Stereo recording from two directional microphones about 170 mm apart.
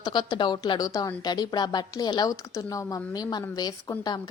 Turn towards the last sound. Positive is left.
turn(degrees=25)  # may be behind; listen again after turning